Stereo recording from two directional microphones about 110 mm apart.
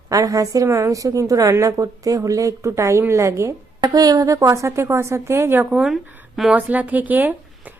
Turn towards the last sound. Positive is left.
turn(degrees=-15)  # may be behind; listen again after turning